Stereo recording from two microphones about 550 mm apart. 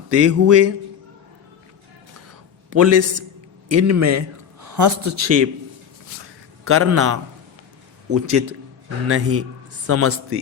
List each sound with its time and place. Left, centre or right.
0.1 s a man's voice: right
2.6 s a man's voice: right
6.7 s a man's voice: right